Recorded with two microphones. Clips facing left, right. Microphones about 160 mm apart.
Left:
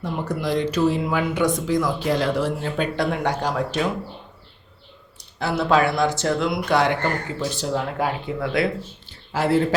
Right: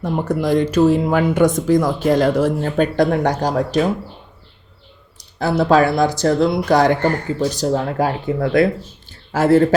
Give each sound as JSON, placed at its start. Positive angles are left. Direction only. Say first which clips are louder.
{"t": 0.0, "sound": "speech", "louder": "right 6 dB", "side_deg": -50}
{"t": 5.4, "sound": "speech", "louder": "right 5 dB", "side_deg": -35}
{"t": 9.0, "sound": "a sound", "louder": "right 7 dB", "side_deg": -45}